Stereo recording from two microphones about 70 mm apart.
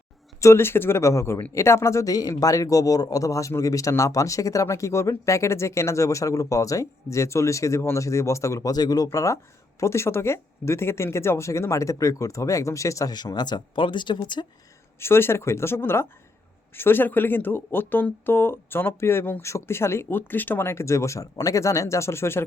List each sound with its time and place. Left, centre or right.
0.3 s speech: left
2.0 s speech: left
2.3 s speech: left
8.7 s speech: left
9.0 s speech: left
13.1 s speech: left
14.9 s speech: left